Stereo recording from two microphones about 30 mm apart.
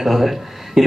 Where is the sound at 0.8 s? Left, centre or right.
Centre.